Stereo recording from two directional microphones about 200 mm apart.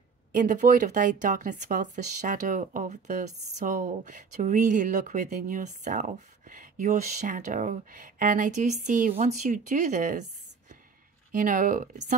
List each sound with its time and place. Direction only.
0.3 s speech: 40° right (ahead or behind)
11.3 s speech: 40° right (ahead or behind)